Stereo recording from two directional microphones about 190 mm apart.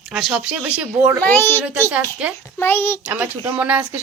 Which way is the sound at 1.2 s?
10° left (ahead or behind).